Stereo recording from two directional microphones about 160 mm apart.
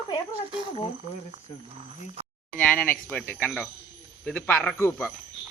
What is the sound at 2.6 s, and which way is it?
Speech, 10° left (ahead or behind).